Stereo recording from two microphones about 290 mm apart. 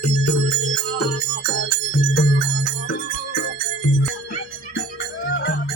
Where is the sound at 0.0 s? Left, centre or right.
Left.